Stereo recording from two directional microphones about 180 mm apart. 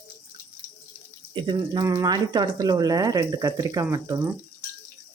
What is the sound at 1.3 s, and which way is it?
Speech, 25° right (ahead or behind).